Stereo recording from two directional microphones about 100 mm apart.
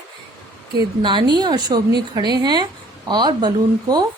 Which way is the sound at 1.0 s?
50° right (ahead or behind).